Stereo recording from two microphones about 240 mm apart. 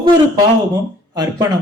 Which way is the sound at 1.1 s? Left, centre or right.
Centre.